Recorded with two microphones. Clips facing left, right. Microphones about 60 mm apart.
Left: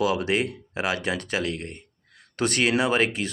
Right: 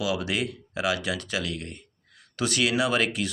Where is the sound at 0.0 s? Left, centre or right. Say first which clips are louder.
Left 4 dB; left.